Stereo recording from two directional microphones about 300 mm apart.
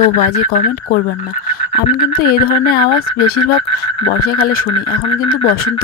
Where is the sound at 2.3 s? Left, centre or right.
Left.